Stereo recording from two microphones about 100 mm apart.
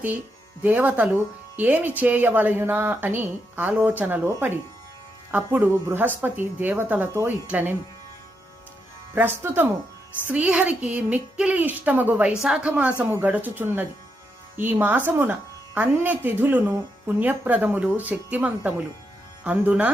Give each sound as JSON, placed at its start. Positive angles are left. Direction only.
{"t": 0.6, "sound": "speech", "side_deg": -15}
{"t": 7.1, "sound": "speech", "side_deg": -30}
{"t": 7.4, "sound": "speech", "side_deg": -15}
{"t": 9.1, "sound": "speech", "side_deg": -20}